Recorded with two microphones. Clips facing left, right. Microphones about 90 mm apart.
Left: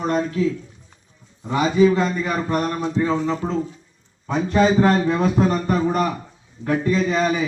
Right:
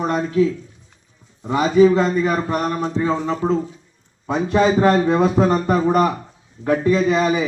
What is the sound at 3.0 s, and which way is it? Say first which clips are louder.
Speech: right 2 dB; 10° right (ahead or behind).